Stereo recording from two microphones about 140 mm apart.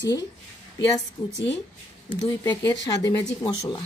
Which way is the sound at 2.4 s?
25° left (ahead or behind).